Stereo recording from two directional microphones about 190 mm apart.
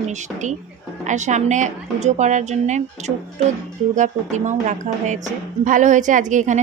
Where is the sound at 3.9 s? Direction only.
40° right (ahead or behind).